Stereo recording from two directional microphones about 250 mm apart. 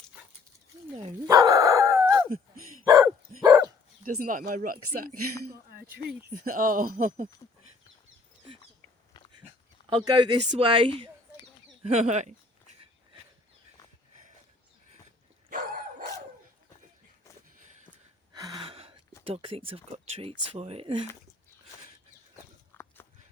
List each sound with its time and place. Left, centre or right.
0.9 s dog: centre
4.0 s speech: right
6.4 s speech: right
9.9 s speech: centre
15.4 s dog: right
18.3 s gasp: centre
19.2 s speech: right
22.7 s a sound: centre